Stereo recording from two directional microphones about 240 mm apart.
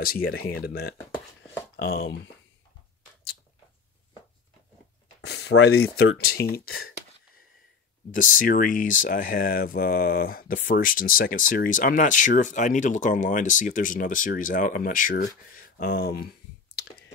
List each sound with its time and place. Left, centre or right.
0.0 s speech: left
5.2 s speech: left
8.1 s speech: left
15.5 s clicking: left